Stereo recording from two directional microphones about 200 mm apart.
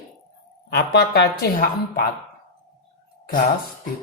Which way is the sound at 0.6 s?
55° left (ahead or behind).